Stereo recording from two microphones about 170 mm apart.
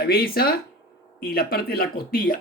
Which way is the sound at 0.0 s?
65° left (ahead or behind).